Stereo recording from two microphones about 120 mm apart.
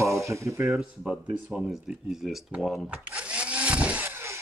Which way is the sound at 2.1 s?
5° right (ahead or behind).